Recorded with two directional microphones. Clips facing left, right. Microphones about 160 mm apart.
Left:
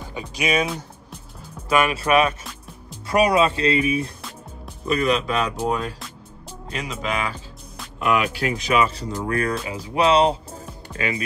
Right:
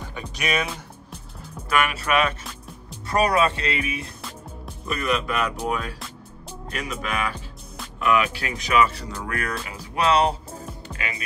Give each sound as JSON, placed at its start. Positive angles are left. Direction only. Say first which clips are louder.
{"t": 0.1, "sound": "music", "louder": "left 4 dB", "side_deg": 10}
{"t": 1.9, "sound": "speech", "louder": "left 4 dB", "side_deg": 30}
{"t": 3.1, "sound": "speech", "louder": "left 3 dB", "side_deg": 15}
{"t": 3.6, "sound": "speech", "louder": "left 7 dB", "side_deg": 35}
{"t": 5.1, "sound": "speech", "louder": "left 2 dB", "side_deg": 25}
{"t": 8.0, "sound": "speech", "louder": "left 1 dB", "side_deg": 35}